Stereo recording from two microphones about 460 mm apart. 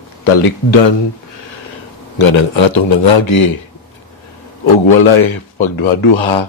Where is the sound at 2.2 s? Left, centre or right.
Left.